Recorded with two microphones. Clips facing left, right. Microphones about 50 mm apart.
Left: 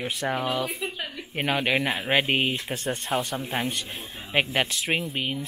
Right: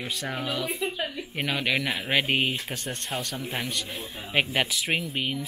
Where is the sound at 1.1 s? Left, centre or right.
Centre.